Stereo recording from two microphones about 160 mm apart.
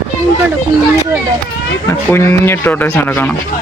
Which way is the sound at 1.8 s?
15° left (ahead or behind).